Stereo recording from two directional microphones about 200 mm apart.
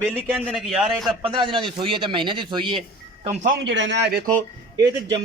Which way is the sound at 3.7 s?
60° right (ahead or behind).